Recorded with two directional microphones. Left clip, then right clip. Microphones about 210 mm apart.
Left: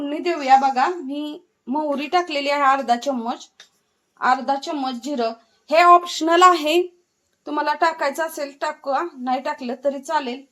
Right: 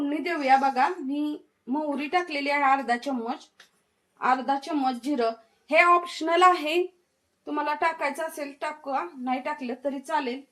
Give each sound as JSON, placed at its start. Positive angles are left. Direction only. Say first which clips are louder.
{"t": 0.1, "sound": "speech", "louder": "left 7 dB", "side_deg": 35}